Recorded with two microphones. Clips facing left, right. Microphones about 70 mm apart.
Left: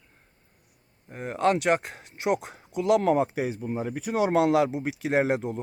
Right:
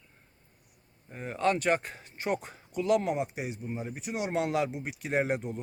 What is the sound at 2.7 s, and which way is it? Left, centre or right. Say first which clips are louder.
Speech: left 5 dB; left.